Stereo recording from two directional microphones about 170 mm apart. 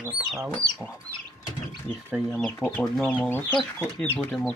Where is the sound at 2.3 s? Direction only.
5° left (ahead or behind).